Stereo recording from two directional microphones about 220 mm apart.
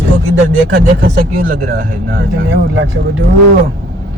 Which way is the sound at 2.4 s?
55° right (ahead or behind).